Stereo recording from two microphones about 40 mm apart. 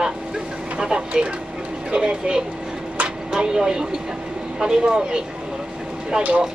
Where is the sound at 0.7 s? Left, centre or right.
Right.